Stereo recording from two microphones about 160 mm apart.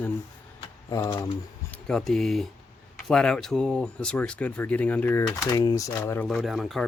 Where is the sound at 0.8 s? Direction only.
20° left (ahead or behind).